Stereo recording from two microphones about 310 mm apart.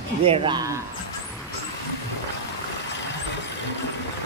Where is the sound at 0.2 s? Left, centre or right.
Centre.